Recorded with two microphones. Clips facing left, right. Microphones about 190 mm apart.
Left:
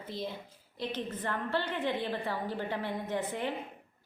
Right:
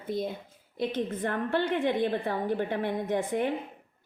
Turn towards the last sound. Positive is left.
turn(degrees=-50)  # may be behind; listen again after turning